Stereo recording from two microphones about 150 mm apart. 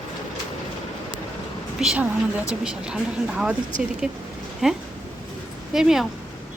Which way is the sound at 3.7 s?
60° right (ahead or behind).